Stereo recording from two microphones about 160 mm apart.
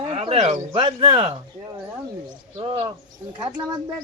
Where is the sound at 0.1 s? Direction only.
40° right (ahead or behind).